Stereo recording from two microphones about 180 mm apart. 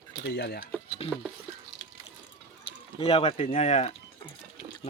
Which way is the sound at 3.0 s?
30° left (ahead or behind).